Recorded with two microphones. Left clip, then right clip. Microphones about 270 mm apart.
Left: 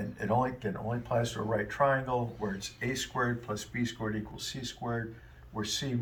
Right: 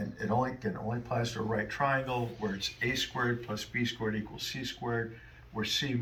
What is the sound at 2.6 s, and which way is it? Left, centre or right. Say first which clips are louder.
Speech: right 3 dB; centre.